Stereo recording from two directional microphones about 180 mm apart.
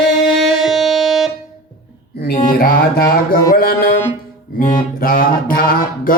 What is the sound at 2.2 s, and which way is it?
Mantra, 55° left (ahead or behind).